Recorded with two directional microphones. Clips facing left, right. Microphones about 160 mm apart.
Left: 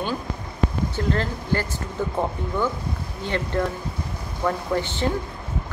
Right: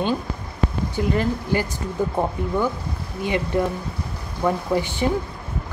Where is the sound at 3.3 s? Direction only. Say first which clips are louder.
Right 3 dB; 10° right (ahead or behind).